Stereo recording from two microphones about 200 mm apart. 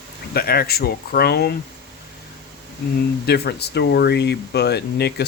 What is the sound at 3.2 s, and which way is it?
Speech, 55° left (ahead or behind).